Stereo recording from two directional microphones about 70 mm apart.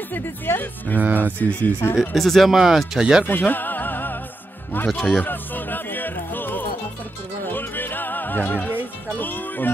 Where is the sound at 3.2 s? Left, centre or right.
Left.